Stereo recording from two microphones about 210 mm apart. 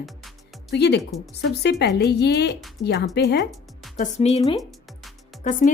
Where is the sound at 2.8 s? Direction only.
55° left (ahead or behind).